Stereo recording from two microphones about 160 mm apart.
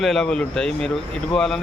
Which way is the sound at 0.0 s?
Centre (ahead or behind).